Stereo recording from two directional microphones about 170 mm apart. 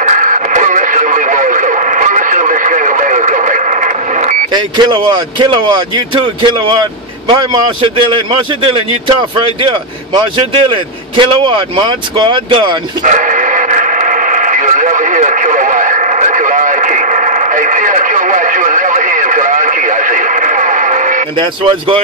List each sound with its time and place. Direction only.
0.0 s radio: 50° right (ahead or behind)
4.6 s speech: 25° right (ahead or behind)
13.0 s radio: 50° right (ahead or behind)
21.4 s speech: 30° right (ahead or behind)